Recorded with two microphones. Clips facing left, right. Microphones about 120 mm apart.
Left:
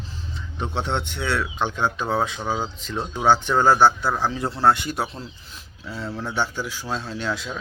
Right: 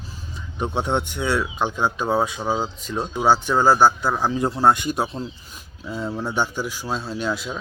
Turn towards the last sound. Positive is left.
turn(degrees=-10)  # may be behind; listen again after turning